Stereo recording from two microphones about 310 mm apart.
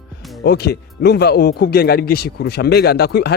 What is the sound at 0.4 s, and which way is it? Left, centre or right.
Speech, left.